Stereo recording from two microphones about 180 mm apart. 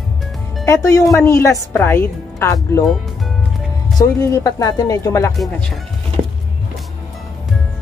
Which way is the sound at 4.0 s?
20° left (ahead or behind).